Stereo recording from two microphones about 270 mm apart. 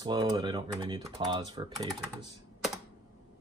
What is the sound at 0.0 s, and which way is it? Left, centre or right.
Speech, centre.